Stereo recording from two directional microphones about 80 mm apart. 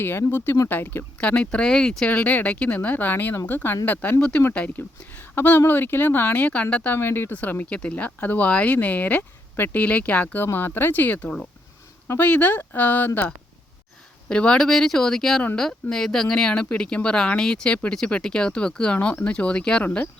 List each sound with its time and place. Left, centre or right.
0.0 s speech: left
1.2 s speech: centre
6.9 s speech: left
14.3 s speech: centre